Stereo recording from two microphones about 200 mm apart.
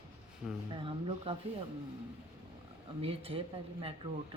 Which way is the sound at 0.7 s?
25° right (ahead or behind).